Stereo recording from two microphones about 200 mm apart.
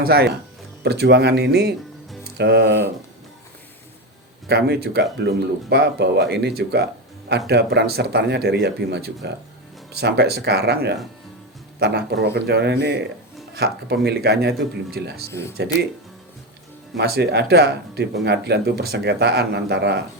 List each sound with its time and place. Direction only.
0.0 s speech: 50° right (ahead or behind)
4.4 s speech: 55° right (ahead or behind)
14.5 s speech: centre (ahead or behind)
14.9 s speech: 50° right (ahead or behind)
15.3 s speech: 15° left (ahead or behind)
17.0 s speech: 55° right (ahead or behind)